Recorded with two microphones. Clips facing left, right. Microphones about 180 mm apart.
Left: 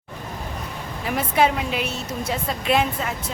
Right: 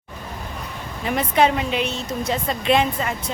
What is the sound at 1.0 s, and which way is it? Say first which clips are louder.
Speech: right 2 dB; 5° left (ahead or behind).